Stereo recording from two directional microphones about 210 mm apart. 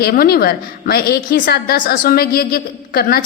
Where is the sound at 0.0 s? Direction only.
45° left (ahead or behind).